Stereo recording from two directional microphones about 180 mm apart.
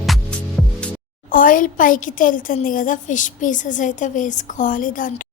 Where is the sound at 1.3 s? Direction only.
50° left (ahead or behind).